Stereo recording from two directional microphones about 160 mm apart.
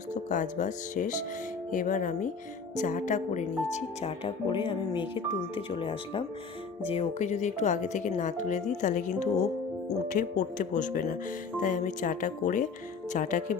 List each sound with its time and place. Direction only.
0.1 s speech: 50° left (ahead or behind)
10.1 s speech: 55° left (ahead or behind)